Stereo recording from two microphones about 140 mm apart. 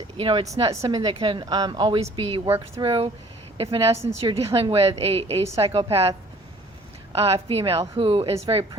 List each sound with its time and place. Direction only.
0.2 s speech: 40° right (ahead or behind)
0.7 s a woman's voice: 25° right (ahead or behind)
2.0 s a woman's voice: 40° right (ahead or behind)